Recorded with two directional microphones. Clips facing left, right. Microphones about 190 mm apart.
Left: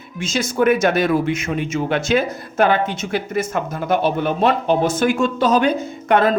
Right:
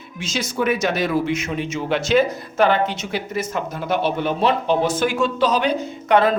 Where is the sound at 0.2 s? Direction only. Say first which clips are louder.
Left 5 dB; 50° left (ahead or behind).